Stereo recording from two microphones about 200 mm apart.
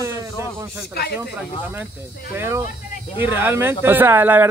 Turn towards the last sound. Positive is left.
turn(degrees=-10)  # may be behind; listen again after turning